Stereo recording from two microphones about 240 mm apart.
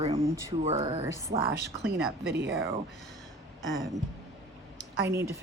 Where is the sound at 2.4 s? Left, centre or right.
Right.